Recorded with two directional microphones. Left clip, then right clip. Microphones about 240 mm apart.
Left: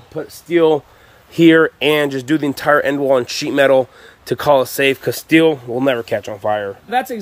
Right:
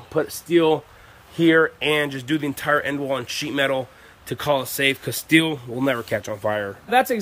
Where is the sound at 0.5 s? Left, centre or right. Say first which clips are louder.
Left 6 dB; centre.